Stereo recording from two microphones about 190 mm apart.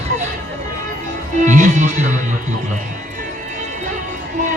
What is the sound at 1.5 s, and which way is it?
Speech, 40° right (ahead or behind).